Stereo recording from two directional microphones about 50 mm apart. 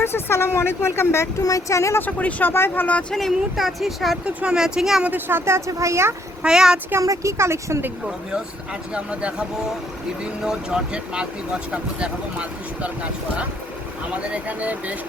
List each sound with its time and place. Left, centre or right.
0.0 s speech: left
2.0 s speech: left
2.4 s speech: left
3.1 s speech: centre
4.5 s speech: centre
5.5 s speech: right
6.4 s speech: centre
6.9 s speech: right
8.9 s speech: right
10.4 s speech: centre
14.1 s speech: right